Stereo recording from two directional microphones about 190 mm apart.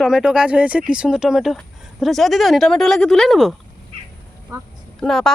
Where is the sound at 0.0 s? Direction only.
5° right (ahead or behind).